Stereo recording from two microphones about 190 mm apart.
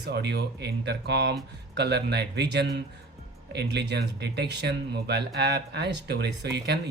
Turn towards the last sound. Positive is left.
turn(degrees=-60)  # may be behind; listen again after turning